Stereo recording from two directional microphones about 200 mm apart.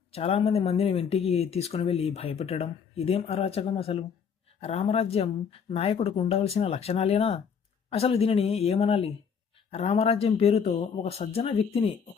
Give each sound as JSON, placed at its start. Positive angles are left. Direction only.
{"t": 0.1, "sound": "speech", "side_deg": 30}